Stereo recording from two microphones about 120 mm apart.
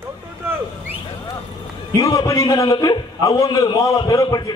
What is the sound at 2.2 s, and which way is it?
A man's voice, 25° left (ahead or behind).